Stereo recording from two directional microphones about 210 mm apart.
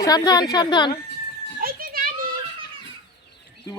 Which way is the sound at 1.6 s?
45° right (ahead or behind).